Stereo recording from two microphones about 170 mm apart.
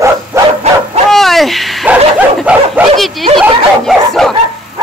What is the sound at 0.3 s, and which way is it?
Dog, 15° right (ahead or behind).